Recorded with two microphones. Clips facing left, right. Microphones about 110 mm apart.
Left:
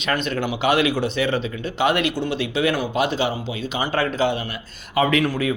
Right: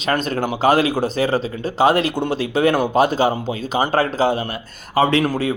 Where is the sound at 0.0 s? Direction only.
35° right (ahead or behind).